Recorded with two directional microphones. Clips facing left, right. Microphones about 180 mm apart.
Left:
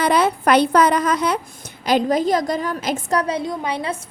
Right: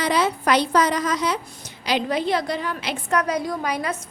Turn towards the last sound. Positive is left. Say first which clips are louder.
# left 1 dB
turn(degrees=25)  # may be behind; listen again after turning